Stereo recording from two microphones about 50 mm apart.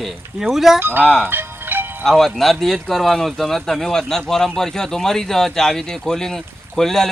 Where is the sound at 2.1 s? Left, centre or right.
Centre.